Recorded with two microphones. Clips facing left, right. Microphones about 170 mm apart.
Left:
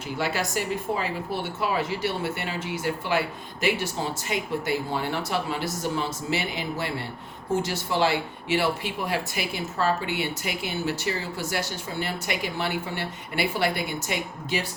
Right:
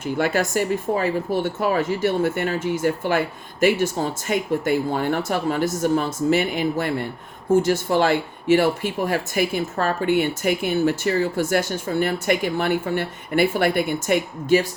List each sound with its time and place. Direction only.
0.0 s speech: 50° right (ahead or behind)